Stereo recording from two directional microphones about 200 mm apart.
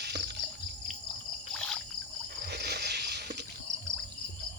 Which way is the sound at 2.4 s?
55° right (ahead or behind).